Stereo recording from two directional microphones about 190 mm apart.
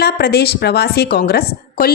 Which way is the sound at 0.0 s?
55° left (ahead or behind).